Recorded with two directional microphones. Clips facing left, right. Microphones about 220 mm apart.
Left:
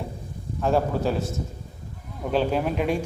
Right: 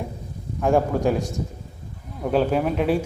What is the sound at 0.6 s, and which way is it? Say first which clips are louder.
Speech: right 3 dB; 15° right (ahead or behind).